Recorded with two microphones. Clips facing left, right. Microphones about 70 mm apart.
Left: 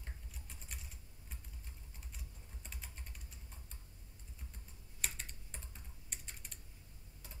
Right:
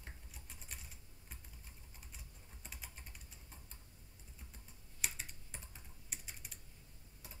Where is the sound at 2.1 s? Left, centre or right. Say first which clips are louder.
Left 2 dB; centre.